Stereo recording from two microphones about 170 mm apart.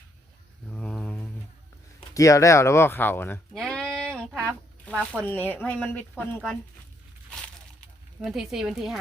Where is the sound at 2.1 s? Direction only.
20° left (ahead or behind).